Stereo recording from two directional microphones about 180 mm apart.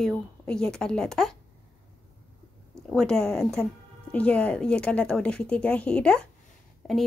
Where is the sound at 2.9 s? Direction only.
Centre (ahead or behind).